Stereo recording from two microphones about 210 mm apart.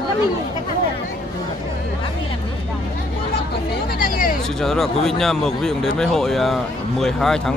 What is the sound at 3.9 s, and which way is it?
Hubbub, 45° left (ahead or behind).